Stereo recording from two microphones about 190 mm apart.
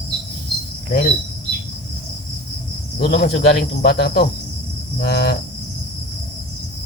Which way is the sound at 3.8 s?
55° left (ahead or behind).